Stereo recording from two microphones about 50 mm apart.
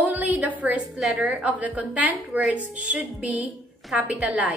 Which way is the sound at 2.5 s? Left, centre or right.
Right.